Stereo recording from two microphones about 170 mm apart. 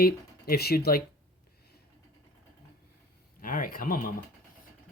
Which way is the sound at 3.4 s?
55° left (ahead or behind).